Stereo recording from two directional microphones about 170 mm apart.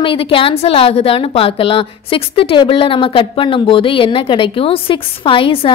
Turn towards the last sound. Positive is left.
turn(degrees=30)  # may be behind; listen again after turning